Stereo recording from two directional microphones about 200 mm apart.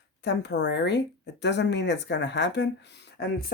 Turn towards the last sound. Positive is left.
turn(degrees=55)  # may be behind; listen again after turning